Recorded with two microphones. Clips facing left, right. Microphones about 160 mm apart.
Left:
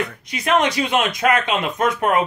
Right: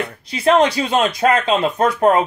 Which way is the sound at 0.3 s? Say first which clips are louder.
Right 5 dB; 30° right (ahead or behind).